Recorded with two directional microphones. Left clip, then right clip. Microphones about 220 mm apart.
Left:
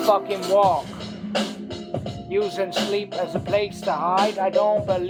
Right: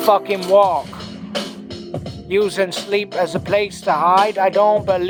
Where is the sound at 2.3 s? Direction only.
35° right (ahead or behind).